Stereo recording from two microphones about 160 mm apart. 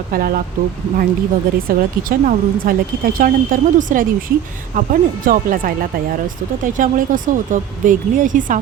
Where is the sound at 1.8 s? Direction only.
65° right (ahead or behind).